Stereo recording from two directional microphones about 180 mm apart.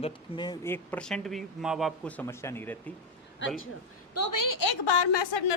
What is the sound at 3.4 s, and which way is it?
Speech, 90° left.